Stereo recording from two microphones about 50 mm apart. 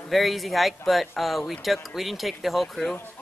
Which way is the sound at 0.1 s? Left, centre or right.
Centre.